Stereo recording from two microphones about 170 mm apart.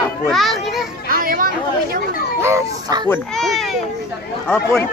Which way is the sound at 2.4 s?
20° right (ahead or behind).